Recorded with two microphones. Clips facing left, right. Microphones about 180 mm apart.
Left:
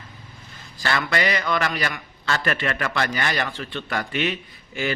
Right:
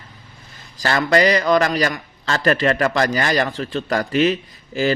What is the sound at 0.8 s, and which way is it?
A man's voice, 40° right (ahead or behind).